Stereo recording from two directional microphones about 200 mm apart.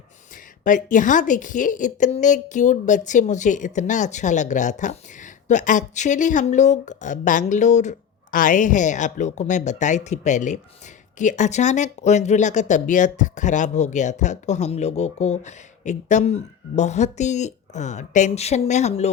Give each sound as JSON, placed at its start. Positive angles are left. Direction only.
{"t": 0.6, "sound": "a woman's voice", "side_deg": 40}